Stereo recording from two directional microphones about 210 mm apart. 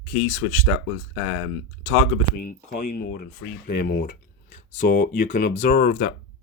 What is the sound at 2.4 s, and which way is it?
Speech, 45° left (ahead or behind).